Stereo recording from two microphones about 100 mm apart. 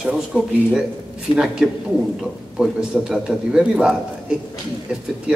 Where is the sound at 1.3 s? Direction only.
60° left (ahead or behind).